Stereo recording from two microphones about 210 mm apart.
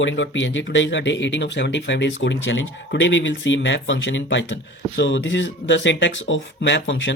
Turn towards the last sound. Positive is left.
turn(degrees=60)  # may be behind; listen again after turning